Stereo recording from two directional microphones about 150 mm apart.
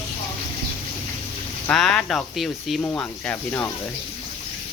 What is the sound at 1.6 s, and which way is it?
Speech, 5° left (ahead or behind).